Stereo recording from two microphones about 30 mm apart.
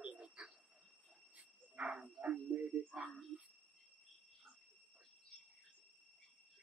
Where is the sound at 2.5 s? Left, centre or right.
Right.